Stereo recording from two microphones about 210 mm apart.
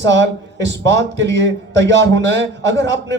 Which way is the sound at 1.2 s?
55° right (ahead or behind).